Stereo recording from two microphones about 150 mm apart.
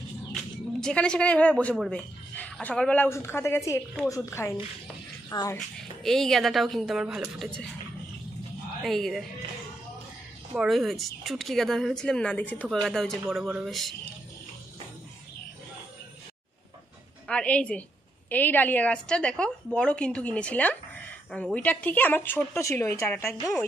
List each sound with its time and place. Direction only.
0.3 s a woman's voice: 5° left (ahead or behind); by 5.6 s 25° left (ahead or behind)
5.8 s speech: 5° left (ahead or behind)
8.8 s speech: centre (ahead or behind)
10.5 s speech: 5° right (ahead or behind)
17.3 s a woman's voice: 10° left (ahead or behind)